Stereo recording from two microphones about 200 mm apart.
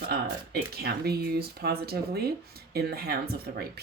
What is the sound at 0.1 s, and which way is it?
Speech, 50° right (ahead or behind).